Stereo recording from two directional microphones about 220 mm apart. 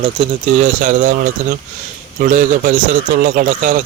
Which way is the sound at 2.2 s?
35° right (ahead or behind).